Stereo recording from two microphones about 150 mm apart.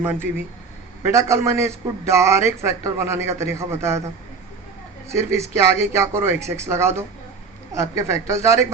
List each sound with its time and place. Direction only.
0.0 s a man's voice: 15° right (ahead or behind)
5.0 s a man's voice: 20° right (ahead or behind)